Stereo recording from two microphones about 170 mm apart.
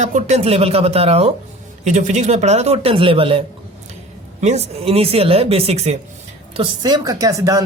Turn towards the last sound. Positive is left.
turn(degrees=-20)  # may be behind; listen again after turning